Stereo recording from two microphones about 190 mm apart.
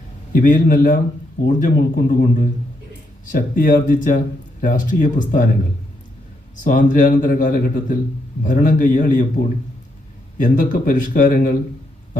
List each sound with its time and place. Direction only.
0.3 s speech: 45° left (ahead or behind)
6.7 s speech: 45° left (ahead or behind)
10.4 s speech: 45° left (ahead or behind)